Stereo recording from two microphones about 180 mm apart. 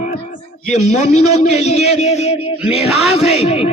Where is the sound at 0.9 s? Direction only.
40° left (ahead or behind).